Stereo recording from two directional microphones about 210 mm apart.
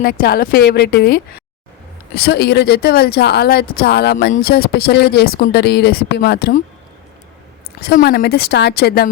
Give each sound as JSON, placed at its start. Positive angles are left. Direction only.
{"t": 0.0, "sound": "speech", "side_deg": 45}
{"t": 7.8, "sound": "speech", "side_deg": 50}